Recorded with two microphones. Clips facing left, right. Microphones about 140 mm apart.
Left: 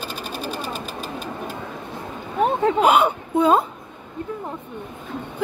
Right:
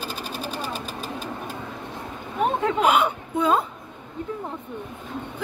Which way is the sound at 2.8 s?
35° left (ahead or behind).